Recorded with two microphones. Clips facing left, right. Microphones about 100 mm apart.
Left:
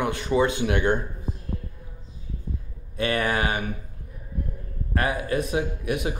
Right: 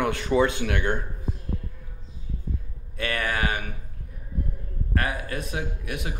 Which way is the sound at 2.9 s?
20° left (ahead or behind).